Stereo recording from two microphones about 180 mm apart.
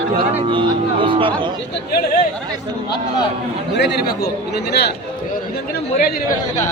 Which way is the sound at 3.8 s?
65° left (ahead or behind).